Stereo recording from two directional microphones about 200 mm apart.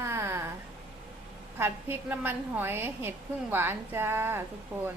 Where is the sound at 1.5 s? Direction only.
10° right (ahead or behind).